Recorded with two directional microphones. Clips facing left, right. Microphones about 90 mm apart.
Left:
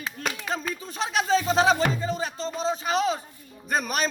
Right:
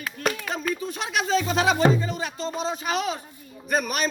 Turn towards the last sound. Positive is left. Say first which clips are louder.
# right 1 dB
turn(degrees=35)  # may be behind; listen again after turning